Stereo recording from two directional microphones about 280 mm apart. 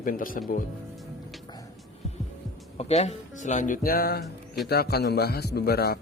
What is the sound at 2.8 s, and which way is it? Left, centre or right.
A man's voice, left.